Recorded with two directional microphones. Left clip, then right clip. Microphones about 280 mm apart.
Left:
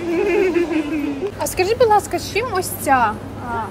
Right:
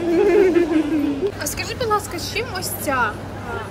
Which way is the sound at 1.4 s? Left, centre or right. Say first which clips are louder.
Left 13 dB; centre.